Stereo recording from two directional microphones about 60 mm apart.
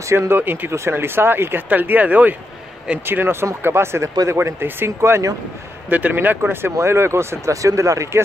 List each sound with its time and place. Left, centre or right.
0.0 s speech: right
0.3 s speech: right
0.7 s speech: right
3.1 s speech: right
5.9 s speech: right